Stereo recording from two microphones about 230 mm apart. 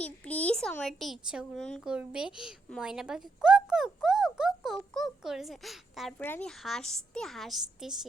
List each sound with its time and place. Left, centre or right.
0.0 s speech: centre